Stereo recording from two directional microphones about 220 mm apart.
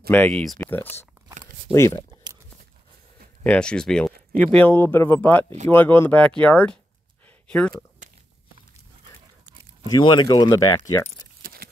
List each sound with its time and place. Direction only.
0.1 s speech: 5° left (ahead or behind)
3.4 s speech: 5° left (ahead or behind)
9.8 s speech: 20° left (ahead or behind)
11.4 s a sound: 45° right (ahead or behind)